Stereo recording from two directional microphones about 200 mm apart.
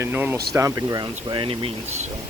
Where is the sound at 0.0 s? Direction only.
10° right (ahead or behind); by 2.0 s 30° right (ahead or behind).